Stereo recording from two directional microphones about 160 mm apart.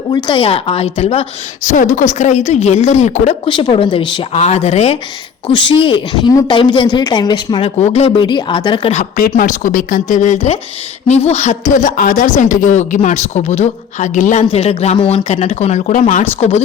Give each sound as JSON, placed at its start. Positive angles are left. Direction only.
{"t": 0.1, "sound": "a woman's voice", "side_deg": 25}
{"t": 1.6, "sound": "a woman's voice", "side_deg": 55}
{"t": 7.8, "sound": "a woman's voice", "side_deg": 40}
{"t": 8.9, "sound": "a woman's voice", "side_deg": 55}
{"t": 16.4, "sound": "a woman's voice", "side_deg": 45}